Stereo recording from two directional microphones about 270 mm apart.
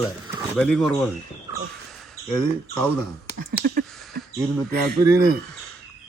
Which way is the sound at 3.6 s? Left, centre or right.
Right.